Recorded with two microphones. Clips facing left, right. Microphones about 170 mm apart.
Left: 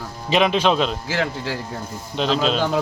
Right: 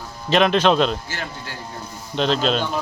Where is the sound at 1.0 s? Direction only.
90° left.